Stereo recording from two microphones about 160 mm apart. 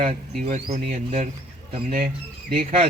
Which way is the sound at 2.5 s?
40° right (ahead or behind).